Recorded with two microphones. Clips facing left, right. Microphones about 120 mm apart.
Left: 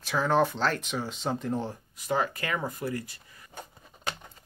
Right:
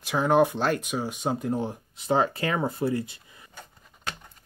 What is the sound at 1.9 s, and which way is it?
Speech, 25° right (ahead or behind).